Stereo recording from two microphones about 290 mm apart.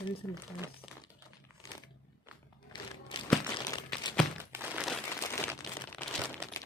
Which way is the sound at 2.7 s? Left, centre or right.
Centre.